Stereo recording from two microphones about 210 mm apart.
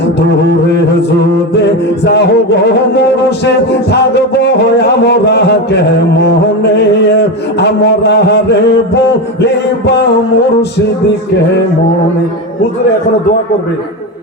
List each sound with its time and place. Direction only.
0.2 s music: 55° left (ahead or behind)